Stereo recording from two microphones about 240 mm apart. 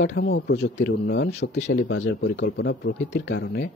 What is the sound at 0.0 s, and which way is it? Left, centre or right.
Speech, left.